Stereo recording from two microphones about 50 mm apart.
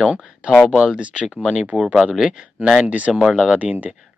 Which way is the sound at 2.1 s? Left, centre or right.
Centre.